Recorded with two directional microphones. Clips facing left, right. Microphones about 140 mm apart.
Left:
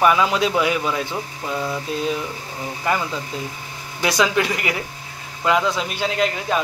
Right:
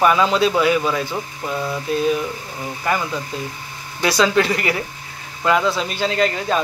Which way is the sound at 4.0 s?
15° left (ahead or behind).